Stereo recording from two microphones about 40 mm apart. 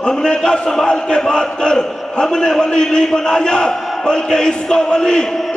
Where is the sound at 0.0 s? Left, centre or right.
Centre.